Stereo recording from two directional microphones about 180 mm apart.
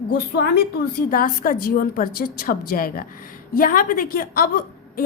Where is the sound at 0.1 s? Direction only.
60° left (ahead or behind).